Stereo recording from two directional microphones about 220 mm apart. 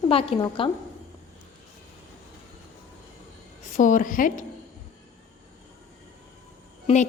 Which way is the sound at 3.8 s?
35° left (ahead or behind).